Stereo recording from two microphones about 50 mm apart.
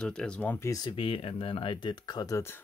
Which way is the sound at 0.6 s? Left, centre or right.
Left.